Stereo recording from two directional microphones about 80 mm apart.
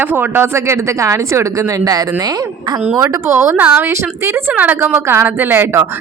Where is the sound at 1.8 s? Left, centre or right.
Right.